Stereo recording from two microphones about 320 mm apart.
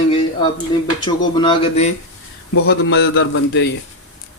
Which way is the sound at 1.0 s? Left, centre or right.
Centre.